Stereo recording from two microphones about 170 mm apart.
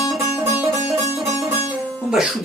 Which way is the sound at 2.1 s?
5° right (ahead or behind).